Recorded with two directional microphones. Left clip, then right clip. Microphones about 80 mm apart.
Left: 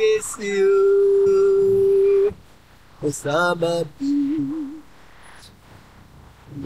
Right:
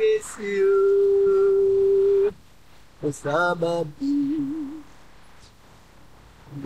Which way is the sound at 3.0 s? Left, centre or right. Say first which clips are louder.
Left 2 dB; centre.